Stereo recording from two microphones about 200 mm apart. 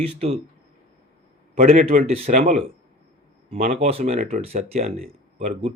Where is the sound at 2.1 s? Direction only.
30° right (ahead or behind).